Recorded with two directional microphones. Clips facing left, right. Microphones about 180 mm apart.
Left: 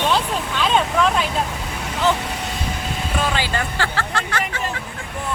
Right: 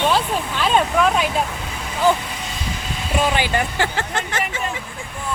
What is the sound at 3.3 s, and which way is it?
Speech, 15° right (ahead or behind).